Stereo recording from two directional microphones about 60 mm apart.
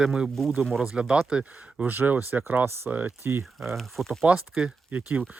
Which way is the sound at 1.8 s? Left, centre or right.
Right.